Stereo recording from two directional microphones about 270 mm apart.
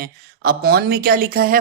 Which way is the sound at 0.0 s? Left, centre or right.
Right.